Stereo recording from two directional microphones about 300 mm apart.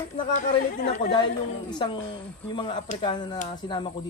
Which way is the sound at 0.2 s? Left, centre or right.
Left.